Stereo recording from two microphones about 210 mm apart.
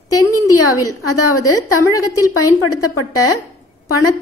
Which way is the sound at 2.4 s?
90° left.